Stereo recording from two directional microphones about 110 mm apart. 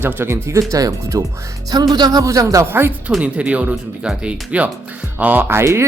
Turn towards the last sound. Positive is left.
turn(degrees=-25)  # may be behind; listen again after turning